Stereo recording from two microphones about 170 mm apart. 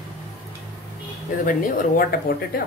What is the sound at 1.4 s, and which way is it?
Speech, 55° left (ahead or behind).